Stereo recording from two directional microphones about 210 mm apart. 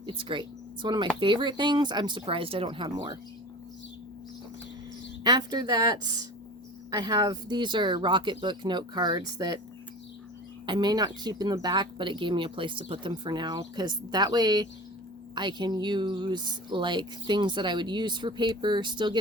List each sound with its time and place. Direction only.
0.0 s speech: 25° right (ahead or behind)
5.2 s speech: 20° right (ahead or behind)
10.7 s speech: 20° right (ahead or behind)